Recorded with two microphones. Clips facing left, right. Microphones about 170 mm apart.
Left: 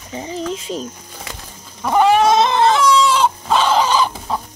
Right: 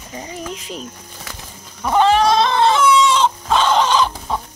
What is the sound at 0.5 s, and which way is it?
Speech, 30° left (ahead or behind).